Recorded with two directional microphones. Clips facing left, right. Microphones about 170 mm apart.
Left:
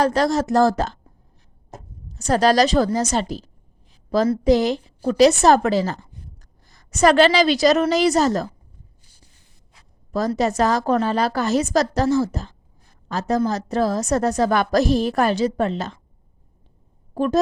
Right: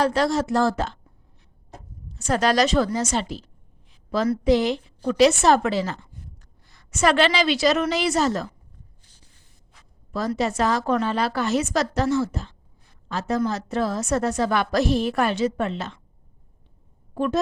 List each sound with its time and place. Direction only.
0.0 s a woman's voice: 40° left (ahead or behind)
10.1 s a woman's voice: 40° left (ahead or behind)
17.2 s a woman's voice: 40° left (ahead or behind)